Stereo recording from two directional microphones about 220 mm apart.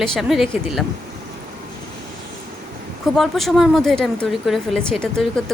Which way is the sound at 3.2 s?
Centre (ahead or behind).